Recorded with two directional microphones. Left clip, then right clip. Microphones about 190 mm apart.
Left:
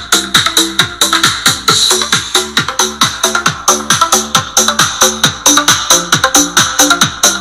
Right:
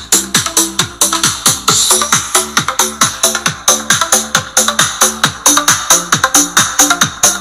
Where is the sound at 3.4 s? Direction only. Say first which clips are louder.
Left 1 dB; 25° right (ahead or behind).